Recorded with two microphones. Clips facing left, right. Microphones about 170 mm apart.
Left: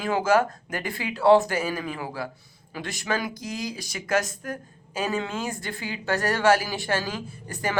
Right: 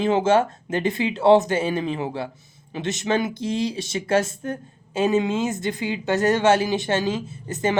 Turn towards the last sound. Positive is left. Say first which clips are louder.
# right 6 dB
turn(degrees=-20)  # may be behind; listen again after turning